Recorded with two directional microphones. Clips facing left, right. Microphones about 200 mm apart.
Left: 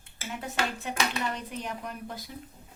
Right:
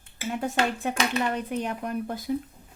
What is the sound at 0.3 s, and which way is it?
Speech, 50° right (ahead or behind).